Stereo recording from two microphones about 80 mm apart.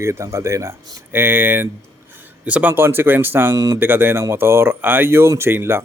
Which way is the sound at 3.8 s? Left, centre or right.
Right.